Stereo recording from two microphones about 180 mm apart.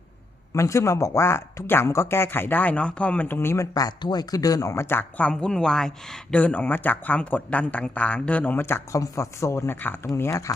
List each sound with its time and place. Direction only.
0.5 s speech: 15° left (ahead or behind)